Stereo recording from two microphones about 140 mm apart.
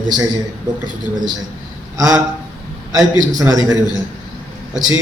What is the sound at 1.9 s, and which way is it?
A man's voice, 25° right (ahead or behind).